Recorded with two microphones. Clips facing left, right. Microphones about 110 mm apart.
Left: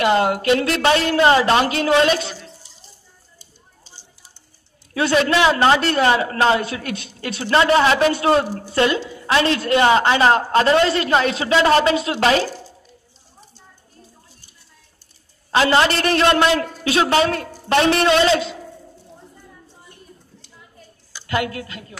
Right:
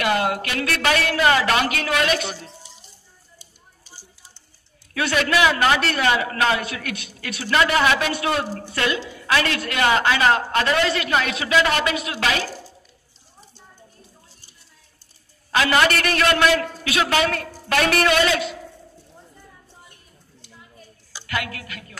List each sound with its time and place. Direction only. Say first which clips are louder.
0.0 s a man's voice: left 5 dB; 30° left (ahead or behind)
3.3 s a sound: left 1 dB; 25° left (ahead or behind)
4.9 s a man's voice: left 4 dB; 30° left (ahead or behind)
15.5 s a man's voice: left 3 dB; 30° left (ahead or behind)
21.3 s a man's voice: left 6 dB; 25° left (ahead or behind)